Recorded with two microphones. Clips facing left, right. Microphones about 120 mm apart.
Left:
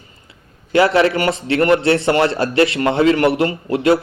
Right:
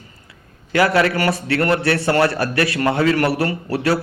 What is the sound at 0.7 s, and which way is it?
A man's voice, 25° left (ahead or behind).